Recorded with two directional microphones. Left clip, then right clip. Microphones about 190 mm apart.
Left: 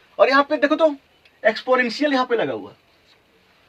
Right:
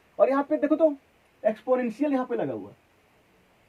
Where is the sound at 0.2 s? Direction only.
15° left (ahead or behind).